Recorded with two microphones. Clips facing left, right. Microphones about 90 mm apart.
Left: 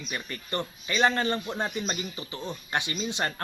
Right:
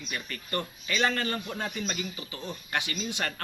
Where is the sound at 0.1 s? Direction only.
25° left (ahead or behind).